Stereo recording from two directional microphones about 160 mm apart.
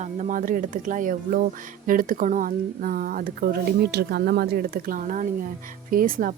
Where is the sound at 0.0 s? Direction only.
50° right (ahead or behind).